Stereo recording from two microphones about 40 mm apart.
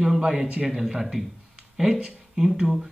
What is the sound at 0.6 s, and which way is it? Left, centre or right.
Speech, centre.